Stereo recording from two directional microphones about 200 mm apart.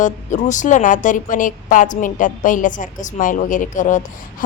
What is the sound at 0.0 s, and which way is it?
Speech, 40° left (ahead or behind).